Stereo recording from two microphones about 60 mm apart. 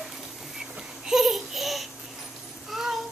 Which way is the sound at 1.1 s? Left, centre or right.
Centre.